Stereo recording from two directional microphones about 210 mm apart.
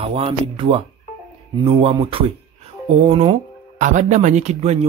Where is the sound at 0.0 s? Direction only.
25° right (ahead or behind).